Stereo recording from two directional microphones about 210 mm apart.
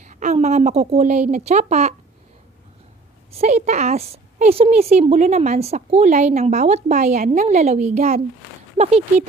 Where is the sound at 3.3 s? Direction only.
30° right (ahead or behind).